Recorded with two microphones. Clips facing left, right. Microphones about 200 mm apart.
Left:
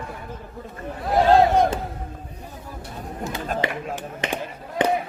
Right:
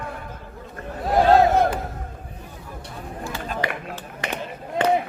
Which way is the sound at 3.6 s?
15° left (ahead or behind).